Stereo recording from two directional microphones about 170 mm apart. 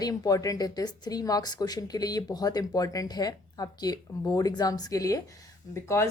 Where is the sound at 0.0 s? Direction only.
20° left (ahead or behind).